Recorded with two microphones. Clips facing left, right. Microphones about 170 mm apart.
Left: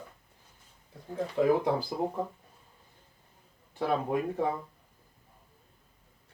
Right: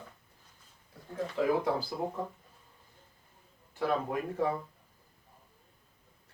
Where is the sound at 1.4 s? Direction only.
20° left (ahead or behind).